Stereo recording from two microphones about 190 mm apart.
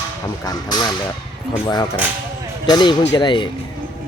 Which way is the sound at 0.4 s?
20° left (ahead or behind).